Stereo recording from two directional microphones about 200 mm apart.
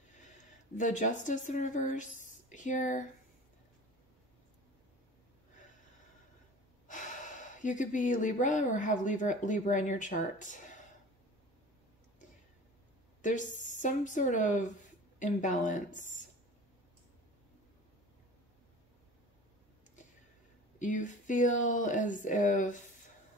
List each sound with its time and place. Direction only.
0.4 s speech: 40° left (ahead or behind)
6.9 s speech: 40° left (ahead or behind)
13.2 s speech: 40° left (ahead or behind)
20.8 s speech: 40° left (ahead or behind)